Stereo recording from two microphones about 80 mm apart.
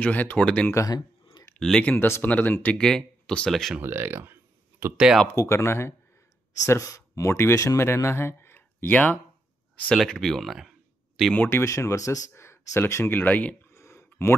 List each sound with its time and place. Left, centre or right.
0.0 s speech: left
0.8 s a sound: left
1.6 s speech: centre
2.7 s speech: centre
3.8 s a sound: right
4.9 s speech: centre
5.3 s speech: left; by 9.2 s centre
9.9 s speech: centre
11.3 s speech: left
13.1 s speech: centre
13.7 s a sound: left